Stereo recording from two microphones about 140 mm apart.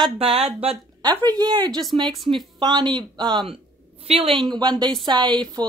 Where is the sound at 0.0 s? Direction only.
45° right (ahead or behind).